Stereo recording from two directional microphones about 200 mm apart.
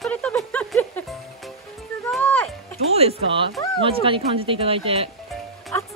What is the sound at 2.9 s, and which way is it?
Speech, 30° right (ahead or behind).